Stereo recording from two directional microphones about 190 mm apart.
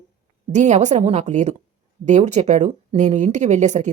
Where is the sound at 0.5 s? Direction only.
40° right (ahead or behind).